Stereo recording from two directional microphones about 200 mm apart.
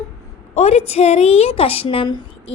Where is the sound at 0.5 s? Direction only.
35° left (ahead or behind).